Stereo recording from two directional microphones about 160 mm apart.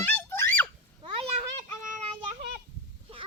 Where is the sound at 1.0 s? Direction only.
40° right (ahead or behind).